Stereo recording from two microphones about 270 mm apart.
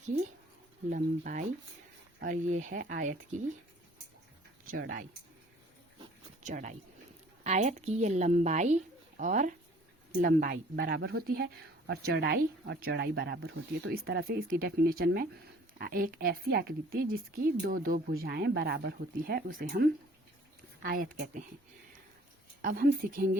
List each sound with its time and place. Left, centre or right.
0.9 s a woman's voice: right
4.6 s a woman's voice: right
6.4 s a woman's voice: right
22.6 s a woman's voice: right